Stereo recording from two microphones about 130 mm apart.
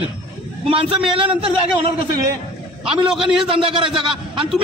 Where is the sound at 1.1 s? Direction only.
45° right (ahead or behind).